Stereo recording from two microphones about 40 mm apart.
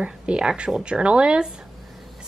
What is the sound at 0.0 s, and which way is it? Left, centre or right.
A woman's voice, right.